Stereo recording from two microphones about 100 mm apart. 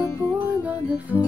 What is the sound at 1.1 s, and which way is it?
Music, 25° left (ahead or behind).